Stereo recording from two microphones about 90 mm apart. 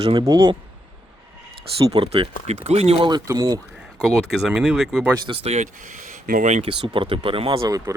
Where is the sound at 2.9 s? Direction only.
60° right (ahead or behind).